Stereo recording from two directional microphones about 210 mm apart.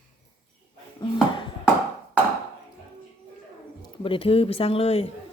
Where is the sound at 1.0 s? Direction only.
20° left (ahead or behind).